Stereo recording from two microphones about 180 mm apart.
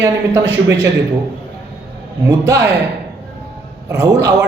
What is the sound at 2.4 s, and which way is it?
Speech, 70° right (ahead or behind).